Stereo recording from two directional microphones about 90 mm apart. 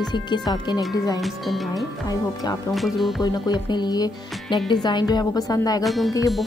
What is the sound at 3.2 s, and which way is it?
Speech, 50° left (ahead or behind).